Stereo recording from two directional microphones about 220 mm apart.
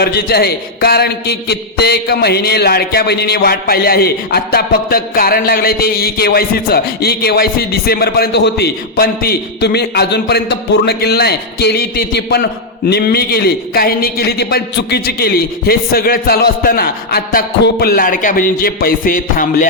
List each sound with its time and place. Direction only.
0.0 s a man's voice: 45° left (ahead or behind)